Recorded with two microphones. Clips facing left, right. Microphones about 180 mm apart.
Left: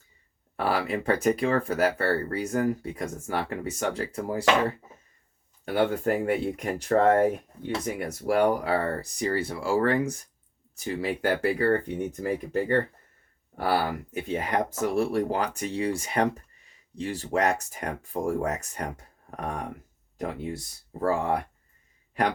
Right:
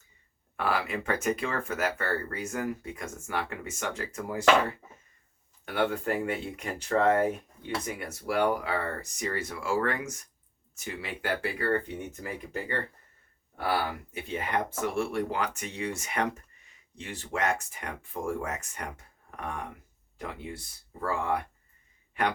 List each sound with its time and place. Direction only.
0.5 s speech: 35° left (ahead or behind)
5.6 s speech: 35° left (ahead or behind)